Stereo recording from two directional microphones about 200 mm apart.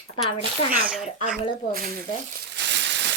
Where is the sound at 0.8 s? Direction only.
5° right (ahead or behind).